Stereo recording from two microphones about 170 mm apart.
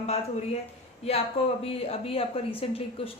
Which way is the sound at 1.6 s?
35° left (ahead or behind).